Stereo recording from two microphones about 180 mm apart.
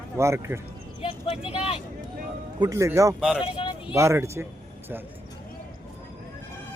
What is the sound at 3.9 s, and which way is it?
Speech, 15° right (ahead or behind).